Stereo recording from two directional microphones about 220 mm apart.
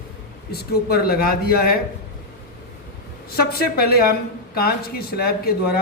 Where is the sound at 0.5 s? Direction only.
45° left (ahead or behind).